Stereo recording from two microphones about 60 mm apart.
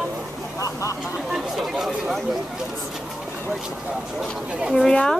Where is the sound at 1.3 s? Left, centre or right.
Centre.